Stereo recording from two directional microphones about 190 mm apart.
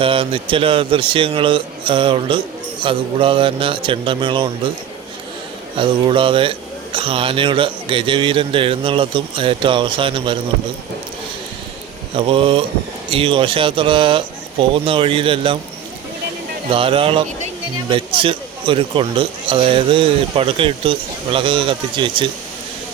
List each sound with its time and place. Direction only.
0.0 s speech: 30° right (ahead or behind)
5.7 s speech: 25° right (ahead or behind)
12.1 s speech: 30° right (ahead or behind)
16.7 s speech: 30° right (ahead or behind)